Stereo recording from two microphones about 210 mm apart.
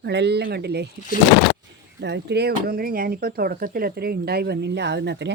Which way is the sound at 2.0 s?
55° right (ahead or behind).